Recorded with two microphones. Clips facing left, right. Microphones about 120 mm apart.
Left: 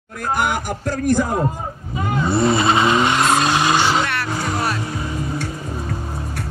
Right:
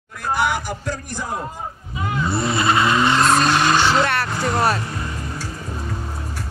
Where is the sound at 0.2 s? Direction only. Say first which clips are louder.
Even; 50° left (ahead or behind).